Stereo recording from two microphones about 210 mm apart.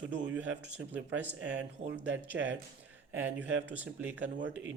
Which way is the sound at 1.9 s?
60° right (ahead or behind).